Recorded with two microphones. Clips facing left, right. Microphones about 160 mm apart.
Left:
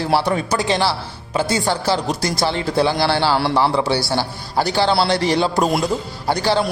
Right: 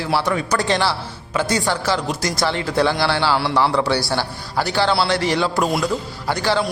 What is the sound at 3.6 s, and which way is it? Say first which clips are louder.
Speech: left 1 dB; 25° left (ahead or behind).